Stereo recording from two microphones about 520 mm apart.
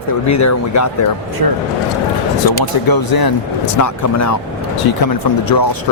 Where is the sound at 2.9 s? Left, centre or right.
Left.